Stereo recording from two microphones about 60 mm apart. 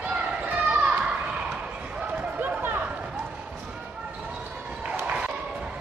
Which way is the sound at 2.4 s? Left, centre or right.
Right.